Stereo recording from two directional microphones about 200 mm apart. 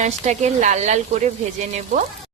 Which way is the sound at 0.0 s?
35° right (ahead or behind).